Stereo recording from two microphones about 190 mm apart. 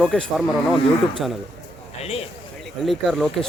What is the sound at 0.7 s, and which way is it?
A man's voice, 25° left (ahead or behind).